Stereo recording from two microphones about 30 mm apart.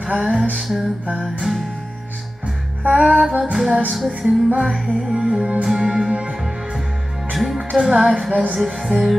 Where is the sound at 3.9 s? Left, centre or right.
Centre.